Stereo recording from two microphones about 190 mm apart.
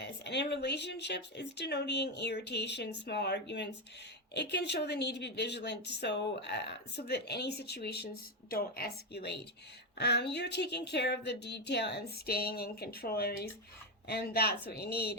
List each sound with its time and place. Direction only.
0.0 s a woman's voice: 65° left (ahead or behind)